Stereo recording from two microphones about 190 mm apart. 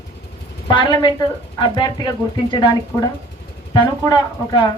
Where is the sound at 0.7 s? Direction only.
25° left (ahead or behind).